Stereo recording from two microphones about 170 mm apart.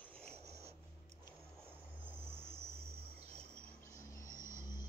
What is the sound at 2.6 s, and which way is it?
Cricket, 35° right (ahead or behind).